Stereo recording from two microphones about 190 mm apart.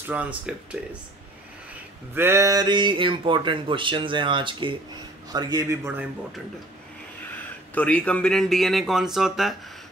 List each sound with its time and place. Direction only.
0.1 s speech: 5° right (ahead or behind)
2.1 s speech: 15° right (ahead or behind)
7.7 s speech: 5° left (ahead or behind)